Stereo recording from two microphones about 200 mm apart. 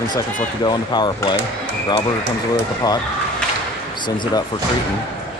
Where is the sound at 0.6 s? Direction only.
20° left (ahead or behind).